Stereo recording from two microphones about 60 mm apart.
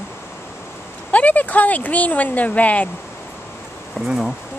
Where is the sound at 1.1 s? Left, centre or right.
Left.